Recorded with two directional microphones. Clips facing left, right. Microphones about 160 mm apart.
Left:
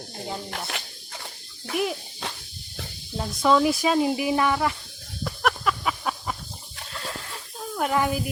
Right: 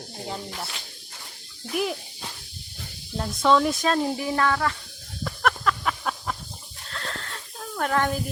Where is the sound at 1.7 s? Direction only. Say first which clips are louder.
Even; centre (ahead or behind).